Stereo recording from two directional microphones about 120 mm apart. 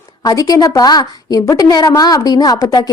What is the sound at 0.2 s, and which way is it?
A woman's voice, 30° left (ahead or behind).